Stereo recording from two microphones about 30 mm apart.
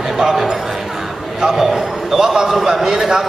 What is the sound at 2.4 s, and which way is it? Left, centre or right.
Speech, centre.